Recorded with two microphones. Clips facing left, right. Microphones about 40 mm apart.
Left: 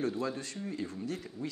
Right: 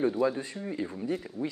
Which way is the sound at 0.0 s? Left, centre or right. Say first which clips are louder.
Right 7 dB; centre.